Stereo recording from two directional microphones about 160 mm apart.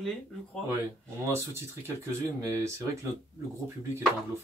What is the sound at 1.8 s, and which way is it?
Speech, 20° right (ahead or behind).